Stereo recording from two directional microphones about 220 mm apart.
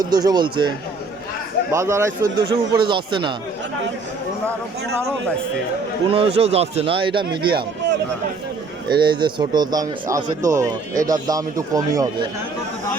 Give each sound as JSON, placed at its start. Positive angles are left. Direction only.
{"t": 0.0, "sound": "speech", "side_deg": -20}
{"t": 1.7, "sound": "speech", "side_deg": -15}
{"t": 6.1, "sound": "speech", "side_deg": -25}
{"t": 9.0, "sound": "speech", "side_deg": -20}